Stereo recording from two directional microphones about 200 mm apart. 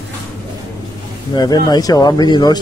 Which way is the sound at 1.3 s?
20° left (ahead or behind).